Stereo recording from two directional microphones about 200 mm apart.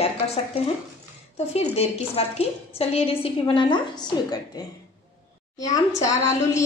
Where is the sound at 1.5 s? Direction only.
30° left (ahead or behind).